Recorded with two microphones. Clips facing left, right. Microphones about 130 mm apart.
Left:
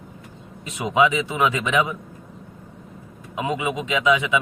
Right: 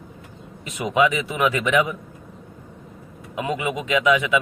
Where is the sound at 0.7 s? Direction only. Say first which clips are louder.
Even; 25° left (ahead or behind).